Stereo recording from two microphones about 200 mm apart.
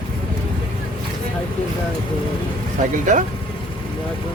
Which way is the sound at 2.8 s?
40° right (ahead or behind).